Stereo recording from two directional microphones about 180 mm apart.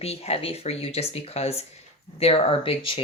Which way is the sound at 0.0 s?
35° left (ahead or behind).